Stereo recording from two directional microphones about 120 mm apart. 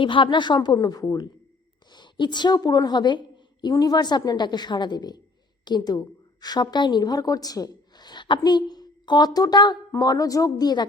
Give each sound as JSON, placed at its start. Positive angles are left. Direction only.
{"t": 0.0, "sound": "a woman's voice", "side_deg": 45}